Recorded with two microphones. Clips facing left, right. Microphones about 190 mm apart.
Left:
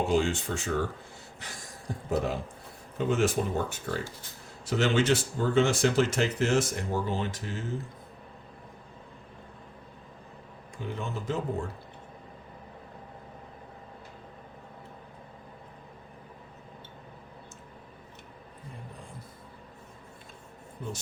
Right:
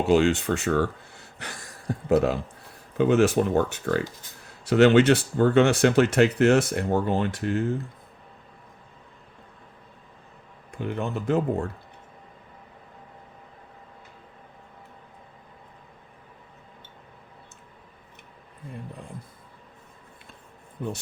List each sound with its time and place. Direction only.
0.0 s speech: 70° right (ahead or behind)
1.4 s a sound: 65° right (ahead or behind)
3.0 s speech: 65° right (ahead or behind)
10.8 s speech: 60° right (ahead or behind)